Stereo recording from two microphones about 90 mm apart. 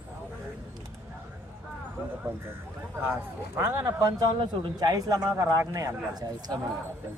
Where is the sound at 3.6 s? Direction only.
25° right (ahead or behind).